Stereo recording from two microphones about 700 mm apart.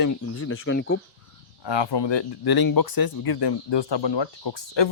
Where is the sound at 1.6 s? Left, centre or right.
Left.